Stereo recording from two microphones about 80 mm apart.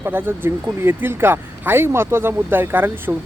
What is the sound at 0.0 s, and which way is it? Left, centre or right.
Speech, right.